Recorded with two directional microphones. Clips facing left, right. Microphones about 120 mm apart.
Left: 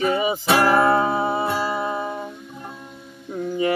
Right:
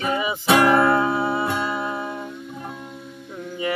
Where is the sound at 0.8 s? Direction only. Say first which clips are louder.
Left 1 dB; 25° left (ahead or behind).